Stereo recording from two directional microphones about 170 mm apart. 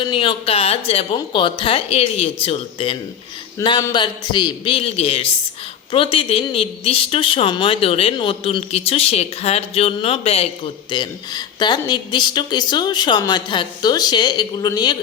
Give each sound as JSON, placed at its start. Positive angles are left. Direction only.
{"t": 0.1, "sound": "a woman's voice", "side_deg": 30}